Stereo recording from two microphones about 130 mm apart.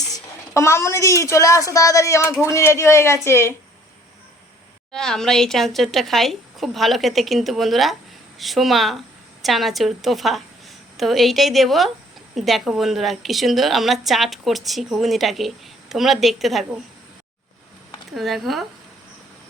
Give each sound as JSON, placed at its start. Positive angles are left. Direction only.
{"t": 0.1, "sound": "a woman's voice", "side_deg": 20}
{"t": 4.9, "sound": "a woman's voice", "side_deg": 5}
{"t": 18.1, "sound": "a woman's voice", "side_deg": 0}